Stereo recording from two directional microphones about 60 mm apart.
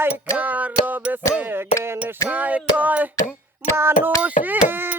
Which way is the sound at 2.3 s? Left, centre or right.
Right.